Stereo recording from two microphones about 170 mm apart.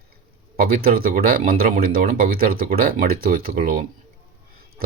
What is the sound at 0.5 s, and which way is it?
Speech, 60° right (ahead or behind).